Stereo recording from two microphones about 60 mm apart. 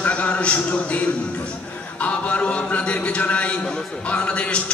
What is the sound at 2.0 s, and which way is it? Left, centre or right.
A man's voice, left.